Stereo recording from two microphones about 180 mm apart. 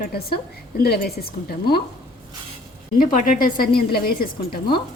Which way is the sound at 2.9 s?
50° left (ahead or behind).